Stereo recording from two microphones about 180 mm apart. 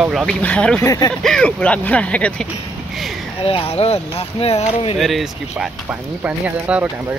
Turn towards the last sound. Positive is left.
turn(degrees=-10)  # may be behind; listen again after turning